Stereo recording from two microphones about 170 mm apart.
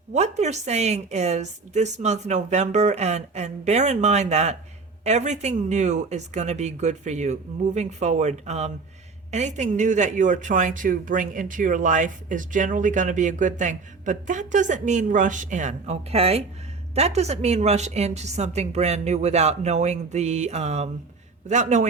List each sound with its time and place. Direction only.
0.1 s a woman's voice: 40° right (ahead or behind)